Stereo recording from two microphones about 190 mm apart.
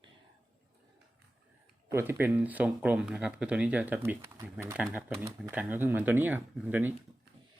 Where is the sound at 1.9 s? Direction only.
10° right (ahead or behind).